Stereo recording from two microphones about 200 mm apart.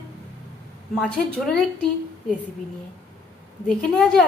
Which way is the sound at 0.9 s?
Centre (ahead or behind).